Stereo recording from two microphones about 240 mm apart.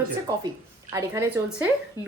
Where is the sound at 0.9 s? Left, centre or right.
Centre.